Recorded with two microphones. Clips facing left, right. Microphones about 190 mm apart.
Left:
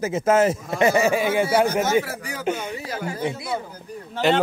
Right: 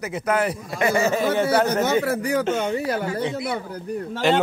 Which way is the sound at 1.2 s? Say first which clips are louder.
Even; 5° left (ahead or behind).